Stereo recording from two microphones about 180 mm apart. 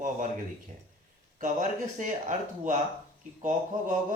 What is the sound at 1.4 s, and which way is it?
Speech, 45° right (ahead or behind).